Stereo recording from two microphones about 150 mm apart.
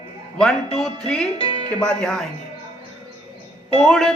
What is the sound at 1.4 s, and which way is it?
Music, 35° left (ahead or behind).